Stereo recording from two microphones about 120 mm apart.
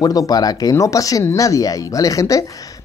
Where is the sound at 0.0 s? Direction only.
30° left (ahead or behind).